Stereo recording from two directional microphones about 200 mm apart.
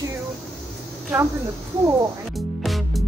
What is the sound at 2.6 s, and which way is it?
Music, centre (ahead or behind).